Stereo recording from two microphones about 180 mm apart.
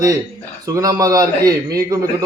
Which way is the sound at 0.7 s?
20° right (ahead or behind).